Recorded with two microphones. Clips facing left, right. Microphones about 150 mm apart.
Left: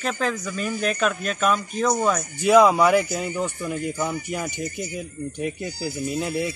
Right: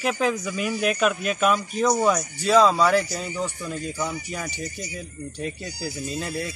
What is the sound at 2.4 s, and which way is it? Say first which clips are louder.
Speech: left 4 dB; 15° left (ahead or behind).